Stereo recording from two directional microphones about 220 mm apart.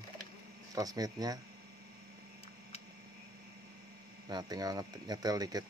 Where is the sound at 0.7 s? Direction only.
15° right (ahead or behind).